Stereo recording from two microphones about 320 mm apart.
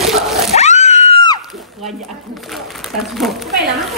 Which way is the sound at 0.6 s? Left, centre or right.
Left.